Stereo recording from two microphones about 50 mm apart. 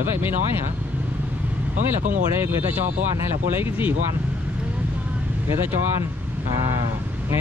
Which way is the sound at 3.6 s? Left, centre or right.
Right.